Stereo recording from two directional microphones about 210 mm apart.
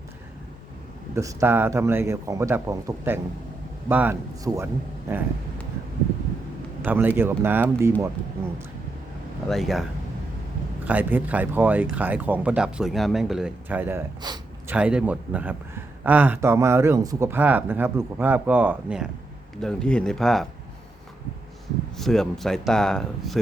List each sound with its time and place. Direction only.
1.1 s speech: 15° right (ahead or behind)
6.8 s speech: 10° right (ahead or behind)
9.5 s speech: centre (ahead or behind)
10.8 s speech: 5° right (ahead or behind)
14.2 s speech: 20° right (ahead or behind)
14.7 s speech: 5° right (ahead or behind)
19.6 s speech: 5° left (ahead or behind)
21.9 s speech: centre (ahead or behind)